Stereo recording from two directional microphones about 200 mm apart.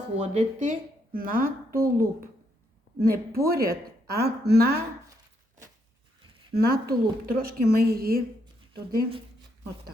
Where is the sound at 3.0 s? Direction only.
50° right (ahead or behind).